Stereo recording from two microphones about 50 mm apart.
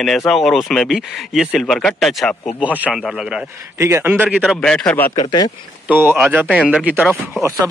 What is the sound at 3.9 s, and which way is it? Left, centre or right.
Speech, right.